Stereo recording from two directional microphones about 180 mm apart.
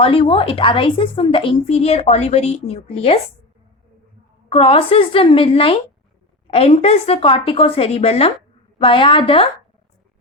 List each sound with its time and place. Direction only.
0.0 s a woman's voice: 30° left (ahead or behind)
4.4 s a woman's voice: 30° left (ahead or behind)